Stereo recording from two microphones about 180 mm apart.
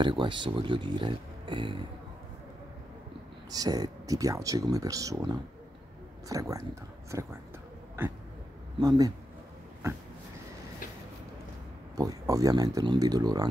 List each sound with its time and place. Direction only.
0.0 s speech: 25° right (ahead or behind)
3.5 s speech: 20° right (ahead or behind)
8.7 s speech: 20° right (ahead or behind)
12.0 s speech: 20° right (ahead or behind)